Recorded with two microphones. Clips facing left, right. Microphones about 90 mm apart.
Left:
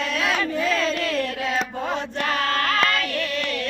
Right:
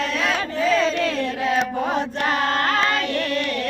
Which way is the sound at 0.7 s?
35° right (ahead or behind).